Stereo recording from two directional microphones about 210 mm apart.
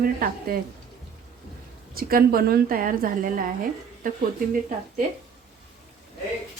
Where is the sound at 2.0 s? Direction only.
45° right (ahead or behind).